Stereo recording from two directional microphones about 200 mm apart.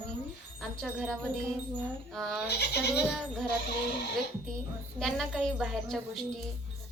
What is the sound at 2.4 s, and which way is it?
Speech, 55° left (ahead or behind).